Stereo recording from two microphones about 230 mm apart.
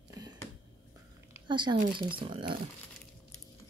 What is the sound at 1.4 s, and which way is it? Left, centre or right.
Speech, centre.